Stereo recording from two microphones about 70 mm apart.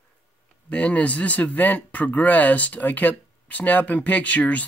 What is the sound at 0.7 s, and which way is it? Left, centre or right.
Speech, centre.